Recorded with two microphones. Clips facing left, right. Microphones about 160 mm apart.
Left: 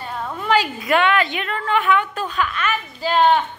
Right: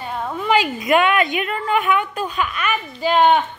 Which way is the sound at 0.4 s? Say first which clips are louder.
Right 1 dB; 10° right (ahead or behind).